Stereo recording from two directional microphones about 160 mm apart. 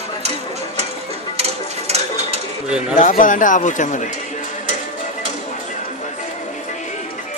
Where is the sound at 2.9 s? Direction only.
50° left (ahead or behind).